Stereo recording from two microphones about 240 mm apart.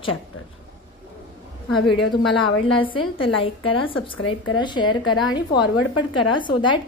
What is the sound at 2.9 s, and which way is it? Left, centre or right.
A woman's voice, left.